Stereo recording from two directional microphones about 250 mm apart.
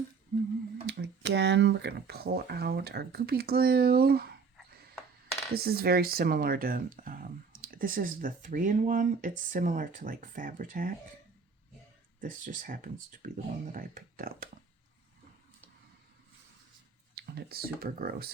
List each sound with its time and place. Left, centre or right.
0.9 s speech: right
4.5 s a sound: centre
5.5 s speech: right
12.2 s speech: right
17.2 s speech: right